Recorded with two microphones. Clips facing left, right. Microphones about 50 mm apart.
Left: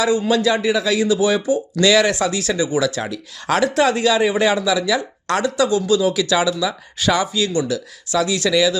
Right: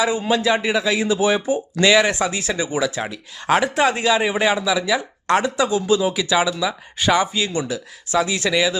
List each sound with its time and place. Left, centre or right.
0.0 s speech: right